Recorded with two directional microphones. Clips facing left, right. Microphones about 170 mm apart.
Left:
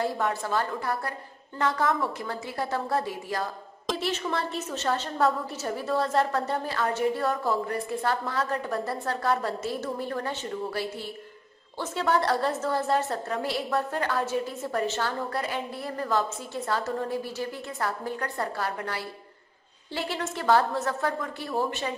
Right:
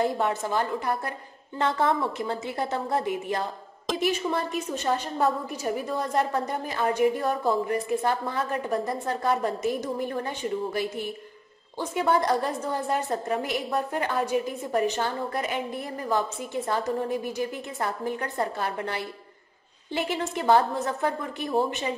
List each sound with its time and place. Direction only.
0.0 s a woman's voice: 20° right (ahead or behind)